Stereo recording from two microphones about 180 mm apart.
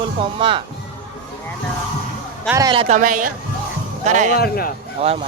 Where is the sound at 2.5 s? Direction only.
20° right (ahead or behind).